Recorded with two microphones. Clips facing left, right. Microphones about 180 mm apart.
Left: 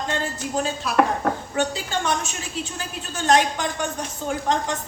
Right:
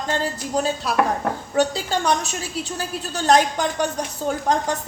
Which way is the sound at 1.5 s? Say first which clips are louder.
Right 4 dB; 40° right (ahead or behind).